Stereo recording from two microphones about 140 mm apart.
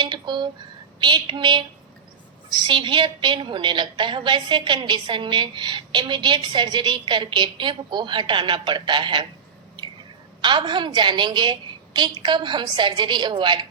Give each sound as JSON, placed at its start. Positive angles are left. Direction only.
{"t": 0.0, "sound": "a sound", "side_deg": -35}
{"t": 0.9, "sound": "a woman's voice", "side_deg": -35}
{"t": 10.4, "sound": "a woman's voice", "side_deg": -35}